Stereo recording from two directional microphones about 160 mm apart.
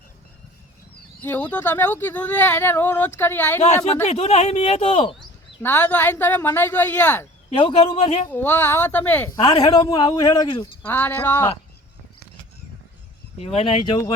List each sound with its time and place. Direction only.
1.2 s speech: 10° left (ahead or behind)
4.0 s speech: 45° left (ahead or behind)
5.6 s speech: 10° left (ahead or behind)
7.5 s speech: 35° left (ahead or behind)
8.3 s speech: 15° left (ahead or behind)
9.6 s speech: 25° left (ahead or behind)
10.8 s speech: 15° left (ahead or behind)
13.4 s speech: 40° left (ahead or behind)